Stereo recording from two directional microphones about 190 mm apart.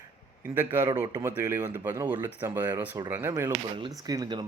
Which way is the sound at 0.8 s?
20° right (ahead or behind).